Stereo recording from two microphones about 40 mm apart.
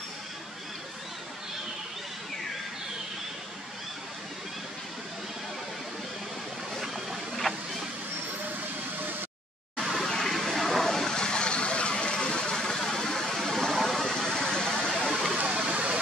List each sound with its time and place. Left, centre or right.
6.7 s vehicle: centre
10.2 s vehicle: centre
15.5 s a sound: right